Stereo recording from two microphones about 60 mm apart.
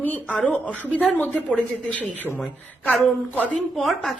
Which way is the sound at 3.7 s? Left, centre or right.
Centre.